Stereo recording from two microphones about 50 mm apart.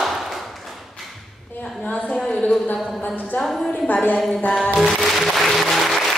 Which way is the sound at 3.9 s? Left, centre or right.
Left.